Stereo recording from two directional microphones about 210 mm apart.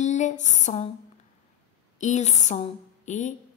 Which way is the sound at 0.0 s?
35° left (ahead or behind).